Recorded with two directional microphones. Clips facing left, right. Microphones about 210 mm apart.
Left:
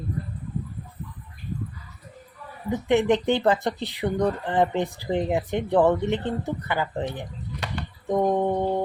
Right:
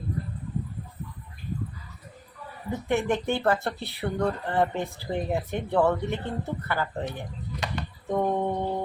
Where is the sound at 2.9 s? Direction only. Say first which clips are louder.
Left 5 dB; 20° left (ahead or behind).